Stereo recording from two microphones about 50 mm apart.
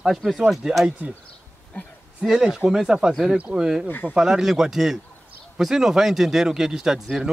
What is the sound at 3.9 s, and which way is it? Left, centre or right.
Speech, left.